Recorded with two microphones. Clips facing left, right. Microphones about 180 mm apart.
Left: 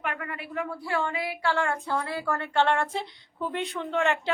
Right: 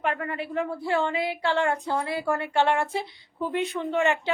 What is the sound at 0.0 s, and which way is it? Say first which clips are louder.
A woman's voice: right 5 dB; 30° right (ahead or behind).